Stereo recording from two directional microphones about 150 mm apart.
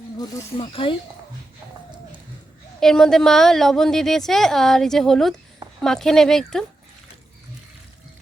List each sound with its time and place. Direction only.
0.5 s speech: 35° left (ahead or behind)
2.8 s a woman's voice: 5° left (ahead or behind)